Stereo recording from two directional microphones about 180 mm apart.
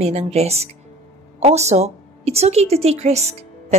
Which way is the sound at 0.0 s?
35° right (ahead or behind).